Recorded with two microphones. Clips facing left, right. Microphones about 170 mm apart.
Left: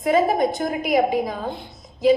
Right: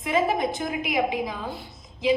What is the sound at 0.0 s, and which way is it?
A woman's voice, 40° left (ahead or behind).